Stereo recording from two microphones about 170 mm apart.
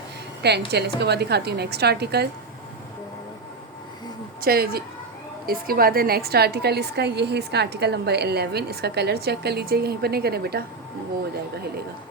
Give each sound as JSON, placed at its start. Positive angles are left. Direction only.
{"t": 0.4, "sound": "a woman's voice", "side_deg": -75}
{"t": 4.4, "sound": "a woman's voice", "side_deg": -60}